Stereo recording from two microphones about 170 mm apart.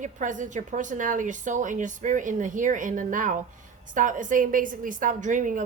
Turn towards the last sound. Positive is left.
turn(degrees=-50)  # may be behind; listen again after turning